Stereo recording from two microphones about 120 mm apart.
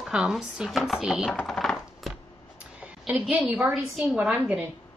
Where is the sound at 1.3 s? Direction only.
5° left (ahead or behind).